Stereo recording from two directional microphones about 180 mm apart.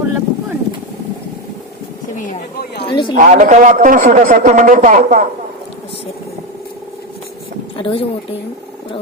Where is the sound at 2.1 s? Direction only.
60° left (ahead or behind).